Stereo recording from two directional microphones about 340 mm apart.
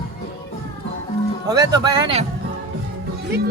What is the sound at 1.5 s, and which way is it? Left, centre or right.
Speech, centre.